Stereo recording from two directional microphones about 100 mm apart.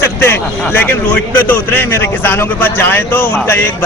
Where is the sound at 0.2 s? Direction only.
20° left (ahead or behind).